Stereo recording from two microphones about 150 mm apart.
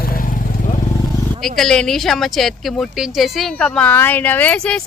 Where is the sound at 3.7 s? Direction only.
10° left (ahead or behind).